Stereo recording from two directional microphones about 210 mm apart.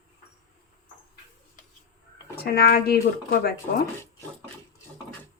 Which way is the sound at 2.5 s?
45° left (ahead or behind).